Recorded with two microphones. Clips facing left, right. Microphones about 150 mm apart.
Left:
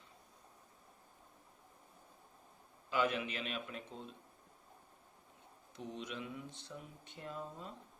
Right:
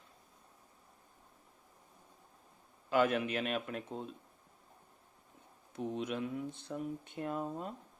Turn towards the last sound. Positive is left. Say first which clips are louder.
# right 8 dB
turn(degrees=-55)  # may be behind; listen again after turning